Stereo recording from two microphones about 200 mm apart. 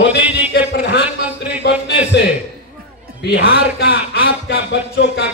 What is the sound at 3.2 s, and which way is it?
Speech, 55° left (ahead or behind).